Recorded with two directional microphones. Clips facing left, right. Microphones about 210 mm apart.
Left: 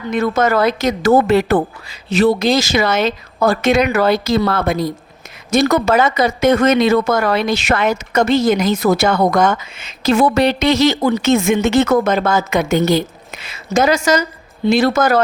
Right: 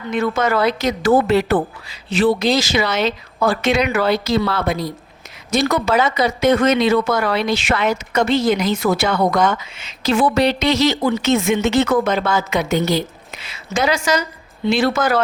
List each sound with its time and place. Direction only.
0.1 s speech: 45° left (ahead or behind)